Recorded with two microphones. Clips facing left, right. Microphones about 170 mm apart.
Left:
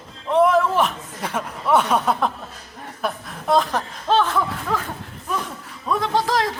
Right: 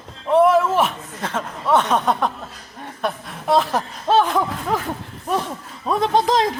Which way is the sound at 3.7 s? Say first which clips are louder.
Right 2 dB; 10° right (ahead or behind).